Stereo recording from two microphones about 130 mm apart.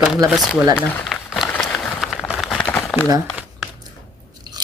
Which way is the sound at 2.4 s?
5° left (ahead or behind).